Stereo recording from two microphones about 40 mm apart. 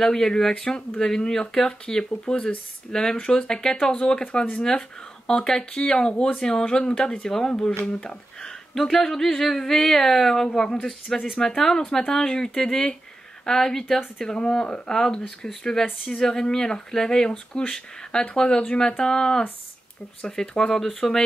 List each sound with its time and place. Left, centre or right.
0.0 s speech: centre